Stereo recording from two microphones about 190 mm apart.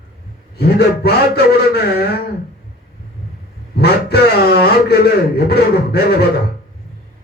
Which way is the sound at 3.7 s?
55° left (ahead or behind).